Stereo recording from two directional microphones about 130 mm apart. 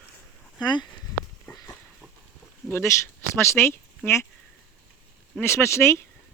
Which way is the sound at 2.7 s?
20° left (ahead or behind).